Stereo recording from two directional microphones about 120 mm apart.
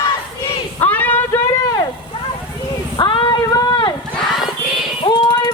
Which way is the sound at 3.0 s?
45° left (ahead or behind).